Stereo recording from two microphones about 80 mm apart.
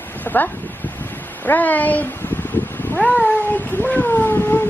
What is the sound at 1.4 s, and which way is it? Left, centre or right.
Cat, left.